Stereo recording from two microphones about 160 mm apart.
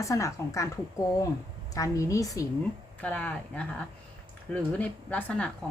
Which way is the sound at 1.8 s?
20° left (ahead or behind).